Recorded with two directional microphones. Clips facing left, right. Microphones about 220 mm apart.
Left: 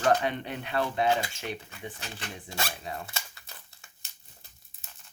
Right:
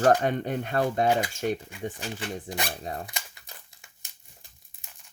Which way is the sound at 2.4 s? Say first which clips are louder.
Right 3 dB; 20° right (ahead or behind).